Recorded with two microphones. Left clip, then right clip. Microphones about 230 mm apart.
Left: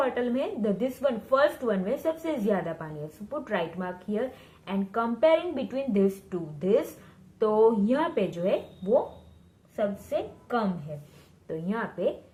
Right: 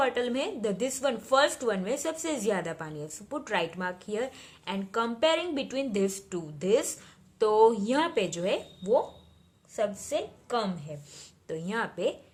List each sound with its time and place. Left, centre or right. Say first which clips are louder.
0.0 s a woman's voice: even; right